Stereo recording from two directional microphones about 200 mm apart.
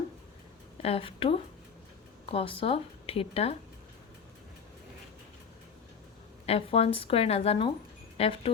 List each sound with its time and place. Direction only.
0.8 s speech: 30° left (ahead or behind)
6.4 s speech: 30° left (ahead or behind)